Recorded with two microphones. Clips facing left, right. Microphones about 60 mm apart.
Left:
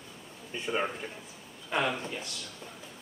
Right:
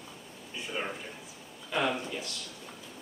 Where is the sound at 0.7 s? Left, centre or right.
Centre.